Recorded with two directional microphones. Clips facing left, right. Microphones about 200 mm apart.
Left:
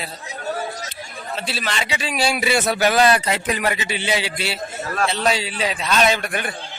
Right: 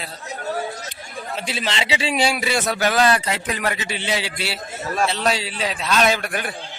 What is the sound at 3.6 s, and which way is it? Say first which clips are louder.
A man's voice: left 2 dB; 5° left (ahead or behind).